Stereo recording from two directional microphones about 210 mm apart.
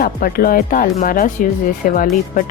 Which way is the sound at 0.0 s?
45° left (ahead or behind).